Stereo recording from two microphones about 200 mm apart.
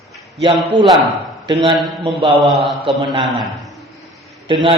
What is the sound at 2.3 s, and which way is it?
Mantra, centre (ahead or behind).